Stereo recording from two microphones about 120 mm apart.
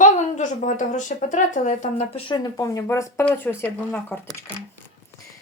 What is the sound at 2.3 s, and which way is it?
Speech, 35° left (ahead or behind).